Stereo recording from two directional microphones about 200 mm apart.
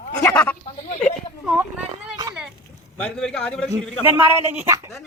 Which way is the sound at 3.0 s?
5° left (ahead or behind).